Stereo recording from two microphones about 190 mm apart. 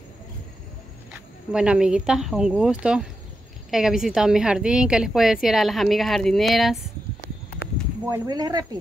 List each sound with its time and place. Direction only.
1.5 s a woman's voice: 5° right (ahead or behind)
8.1 s speech: 20° right (ahead or behind)